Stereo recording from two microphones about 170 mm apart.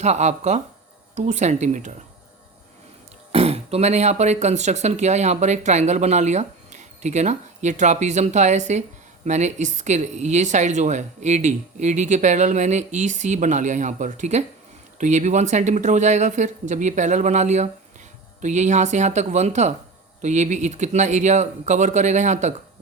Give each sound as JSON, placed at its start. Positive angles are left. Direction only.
{"t": 0.0, "sound": "speech", "side_deg": -40}
{"t": 3.3, "sound": "speech", "side_deg": -35}